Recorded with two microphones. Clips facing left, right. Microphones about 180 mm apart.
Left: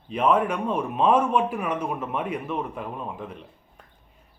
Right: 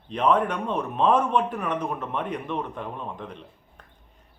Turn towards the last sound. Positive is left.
turn(degrees=5)  # may be behind; listen again after turning